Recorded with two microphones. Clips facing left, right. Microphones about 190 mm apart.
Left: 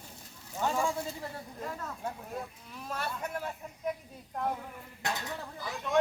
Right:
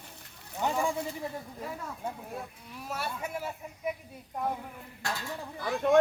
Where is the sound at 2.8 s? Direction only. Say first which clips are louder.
Right 1 dB; 10° right (ahead or behind).